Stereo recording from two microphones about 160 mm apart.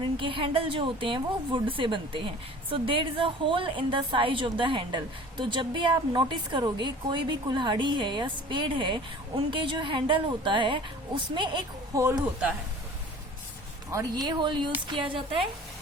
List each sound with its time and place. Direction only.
0.0 s a woman's voice: 35° right (ahead or behind)
13.9 s a woman's voice: 25° right (ahead or behind)